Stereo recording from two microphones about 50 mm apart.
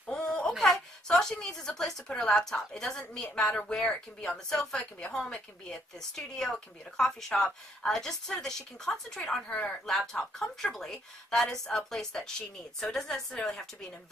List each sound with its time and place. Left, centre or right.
0.1 s wail: centre
0.5 s a sound: centre
2.5 s speech: centre
3.4 s speech: left